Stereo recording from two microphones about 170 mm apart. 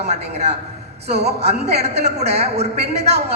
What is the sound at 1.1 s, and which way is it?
Speech, 75° right (ahead or behind).